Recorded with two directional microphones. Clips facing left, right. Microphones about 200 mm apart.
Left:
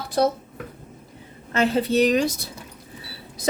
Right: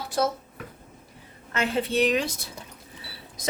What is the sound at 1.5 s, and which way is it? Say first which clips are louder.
Speech: left 5 dB; 35° left (ahead or behind).